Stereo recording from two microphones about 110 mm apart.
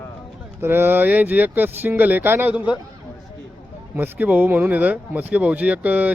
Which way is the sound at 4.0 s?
15° right (ahead or behind).